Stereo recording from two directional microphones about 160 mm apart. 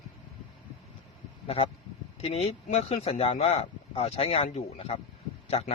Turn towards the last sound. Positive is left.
turn(degrees=40)  # may be behind; listen again after turning